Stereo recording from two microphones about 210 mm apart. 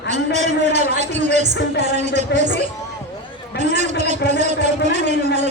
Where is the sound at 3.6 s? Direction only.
35° right (ahead or behind).